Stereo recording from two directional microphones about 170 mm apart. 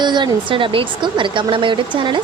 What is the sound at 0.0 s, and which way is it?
A woman's voice, 25° right (ahead or behind).